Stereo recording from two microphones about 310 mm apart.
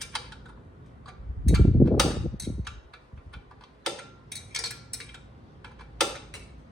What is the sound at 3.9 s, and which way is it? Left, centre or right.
Tick-tock, centre.